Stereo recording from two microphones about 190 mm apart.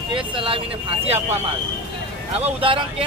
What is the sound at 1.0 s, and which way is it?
Speech, 35° right (ahead or behind).